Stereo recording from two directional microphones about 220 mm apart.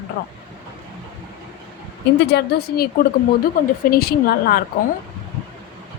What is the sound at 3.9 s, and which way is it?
Speech, 45° left (ahead or behind).